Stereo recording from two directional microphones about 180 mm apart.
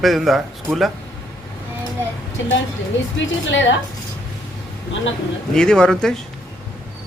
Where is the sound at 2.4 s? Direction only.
90° left.